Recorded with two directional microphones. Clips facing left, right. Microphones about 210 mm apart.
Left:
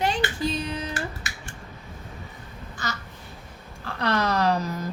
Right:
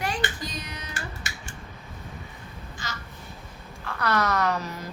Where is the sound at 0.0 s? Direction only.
25° left (ahead or behind).